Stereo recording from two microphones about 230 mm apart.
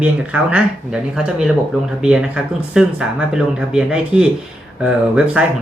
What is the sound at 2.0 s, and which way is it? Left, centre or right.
Speech, centre.